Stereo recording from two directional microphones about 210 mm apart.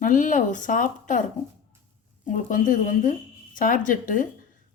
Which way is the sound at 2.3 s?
35° left (ahead or behind).